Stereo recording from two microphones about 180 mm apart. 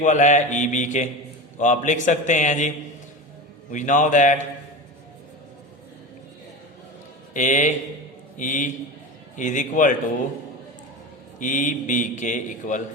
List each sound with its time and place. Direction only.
0.0 s a man's voice: 45° left (ahead or behind)
7.3 s a man's voice: 45° left (ahead or behind)
11.3 s a man's voice: 45° left (ahead or behind)